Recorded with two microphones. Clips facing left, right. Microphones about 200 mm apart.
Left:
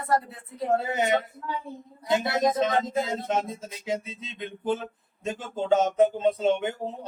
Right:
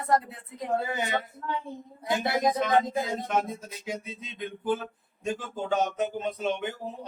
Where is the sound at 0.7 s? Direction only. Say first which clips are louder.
Left 4 dB; 20° left (ahead or behind).